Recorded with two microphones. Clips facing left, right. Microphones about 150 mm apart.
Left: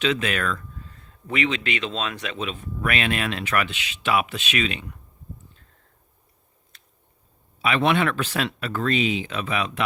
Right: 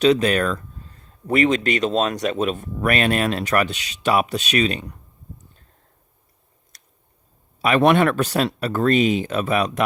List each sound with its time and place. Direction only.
0.0 s speech: 40° right (ahead or behind)
7.6 s speech: 45° right (ahead or behind)